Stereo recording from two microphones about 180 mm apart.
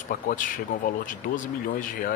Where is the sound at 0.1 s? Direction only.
50° left (ahead or behind).